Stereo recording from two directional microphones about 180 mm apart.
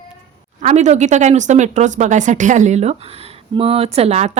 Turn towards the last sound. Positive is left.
turn(degrees=-40)  # may be behind; listen again after turning